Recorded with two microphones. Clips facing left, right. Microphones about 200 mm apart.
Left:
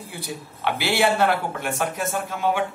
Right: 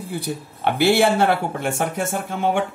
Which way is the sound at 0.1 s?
55° right (ahead or behind).